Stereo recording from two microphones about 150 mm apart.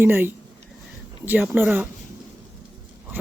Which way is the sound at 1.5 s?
15° right (ahead or behind).